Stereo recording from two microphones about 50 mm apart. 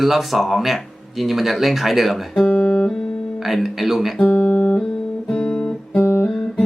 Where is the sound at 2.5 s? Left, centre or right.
Left.